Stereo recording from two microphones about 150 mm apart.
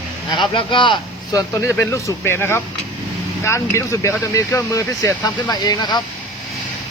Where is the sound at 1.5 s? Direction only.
20° left (ahead or behind).